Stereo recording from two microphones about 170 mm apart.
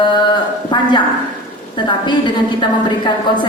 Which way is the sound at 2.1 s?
25° left (ahead or behind).